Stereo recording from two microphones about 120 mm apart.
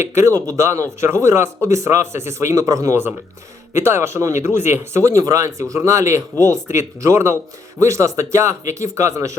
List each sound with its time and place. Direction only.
0.0 s speech: 25° right (ahead or behind)